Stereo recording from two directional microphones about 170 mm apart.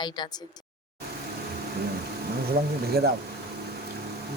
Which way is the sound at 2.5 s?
65° right (ahead or behind).